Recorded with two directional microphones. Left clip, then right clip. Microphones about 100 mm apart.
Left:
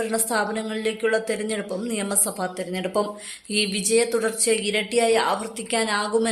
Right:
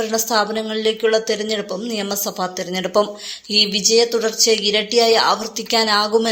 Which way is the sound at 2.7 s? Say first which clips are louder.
Right 8 dB; 35° right (ahead or behind).